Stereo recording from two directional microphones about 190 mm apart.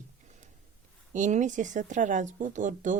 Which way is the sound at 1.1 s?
40° right (ahead or behind).